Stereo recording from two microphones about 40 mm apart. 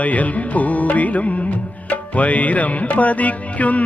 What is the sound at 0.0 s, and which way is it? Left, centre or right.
Music, left.